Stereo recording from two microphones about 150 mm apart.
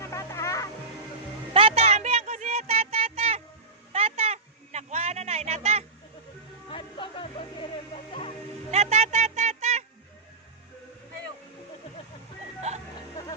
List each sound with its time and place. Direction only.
0.0 s music: 20° left (ahead or behind)
1.5 s music: 40° right (ahead or behind)
3.9 s a sound: 40° right (ahead or behind)
6.7 s music: 35° left (ahead or behind)
8.7 s music: 50° right (ahead or behind)
12.7 s music: 50° right (ahead or behind)